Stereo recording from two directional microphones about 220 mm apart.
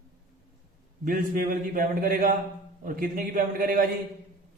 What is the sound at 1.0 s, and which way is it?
A man's voice, 40° right (ahead or behind).